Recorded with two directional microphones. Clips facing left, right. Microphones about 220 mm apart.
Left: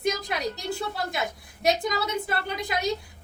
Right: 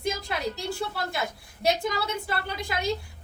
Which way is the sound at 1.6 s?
20° left (ahead or behind).